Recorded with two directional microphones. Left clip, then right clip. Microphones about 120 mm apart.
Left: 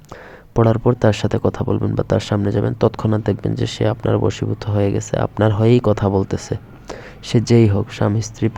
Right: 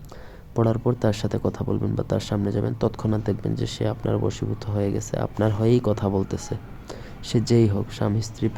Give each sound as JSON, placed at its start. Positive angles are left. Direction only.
{"t": 0.5, "sound": "speech", "side_deg": 40}